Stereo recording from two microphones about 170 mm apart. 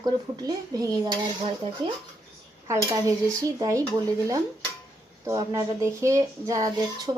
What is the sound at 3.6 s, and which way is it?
Speech, 20° right (ahead or behind).